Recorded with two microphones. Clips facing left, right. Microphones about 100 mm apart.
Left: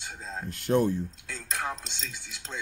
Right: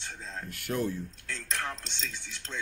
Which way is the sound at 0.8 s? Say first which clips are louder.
Left 5 dB; 20° left (ahead or behind).